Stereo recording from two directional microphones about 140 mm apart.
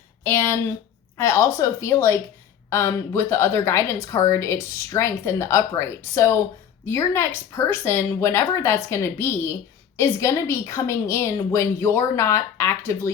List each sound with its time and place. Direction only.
0.3 s a woman's voice: 15° left (ahead or behind)